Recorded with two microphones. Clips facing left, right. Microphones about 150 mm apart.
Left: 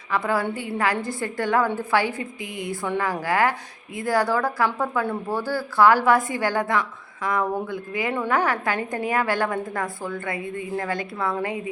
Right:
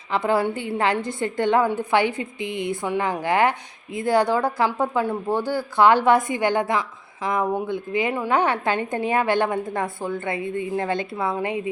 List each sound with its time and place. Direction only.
0.1 s a woman's voice: 25° right (ahead or behind)